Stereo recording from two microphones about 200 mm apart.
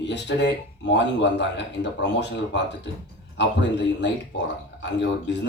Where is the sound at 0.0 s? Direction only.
60° left (ahead or behind).